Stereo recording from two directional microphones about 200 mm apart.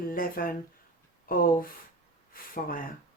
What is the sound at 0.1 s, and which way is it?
Speech, 45° left (ahead or behind).